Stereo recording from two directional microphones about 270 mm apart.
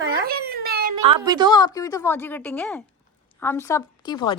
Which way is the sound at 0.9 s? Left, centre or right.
Centre.